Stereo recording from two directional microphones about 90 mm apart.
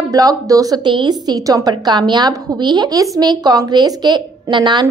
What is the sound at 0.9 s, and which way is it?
A woman's voice, 55° right (ahead or behind).